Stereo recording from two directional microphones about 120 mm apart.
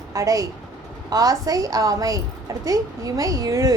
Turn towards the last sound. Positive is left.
turn(degrees=-30)  # may be behind; listen again after turning